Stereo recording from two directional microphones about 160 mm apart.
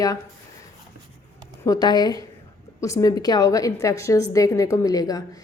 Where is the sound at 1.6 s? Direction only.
25° left (ahead or behind).